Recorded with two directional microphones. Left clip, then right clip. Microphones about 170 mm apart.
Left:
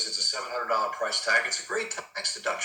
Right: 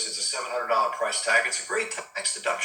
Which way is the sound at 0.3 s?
20° left (ahead or behind).